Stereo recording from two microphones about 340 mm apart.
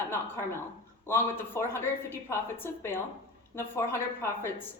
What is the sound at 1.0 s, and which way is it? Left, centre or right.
A woman's voice, centre.